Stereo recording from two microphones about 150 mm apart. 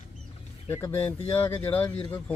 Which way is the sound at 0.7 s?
15° left (ahead or behind).